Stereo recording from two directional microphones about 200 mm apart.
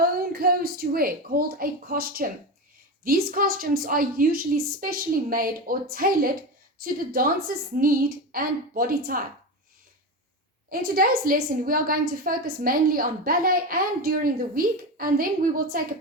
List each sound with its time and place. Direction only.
0.0 s a woman's voice: 50° right (ahead or behind)
10.7 s a woman's voice: 45° right (ahead or behind)